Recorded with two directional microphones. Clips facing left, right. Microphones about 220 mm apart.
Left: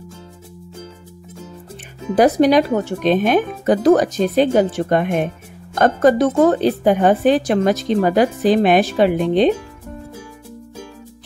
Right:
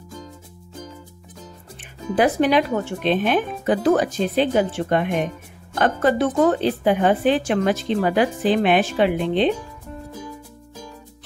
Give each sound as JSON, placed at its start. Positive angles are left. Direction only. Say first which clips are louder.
{"t": 2.1, "sound": "speech", "louder": "left 5 dB", "side_deg": 40}